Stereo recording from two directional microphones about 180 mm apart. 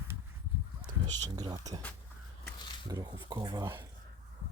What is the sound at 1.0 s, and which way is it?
Speech, 10° left (ahead or behind).